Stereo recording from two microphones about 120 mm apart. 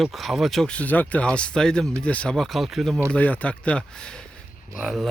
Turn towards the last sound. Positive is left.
turn(degrees=0)  # may be behind; listen again after turning